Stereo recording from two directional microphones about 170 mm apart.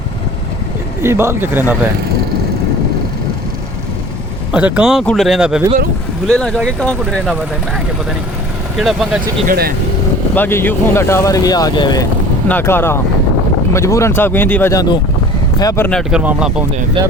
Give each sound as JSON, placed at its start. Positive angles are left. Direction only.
{"t": 1.0, "sound": "speech", "side_deg": -15}
{"t": 4.5, "sound": "speech", "side_deg": -5}
{"t": 8.8, "sound": "speech", "side_deg": 0}
{"t": 9.5, "sound": "speech", "side_deg": -60}
{"t": 10.3, "sound": "speech", "side_deg": 10}
{"t": 12.5, "sound": "speech", "side_deg": 10}
{"t": 15.9, "sound": "speech", "side_deg": 0}
{"t": 17.0, "sound": "speech", "side_deg": -30}